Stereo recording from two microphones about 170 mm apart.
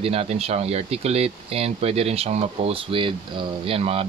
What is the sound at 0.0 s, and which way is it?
Speech, 35° right (ahead or behind).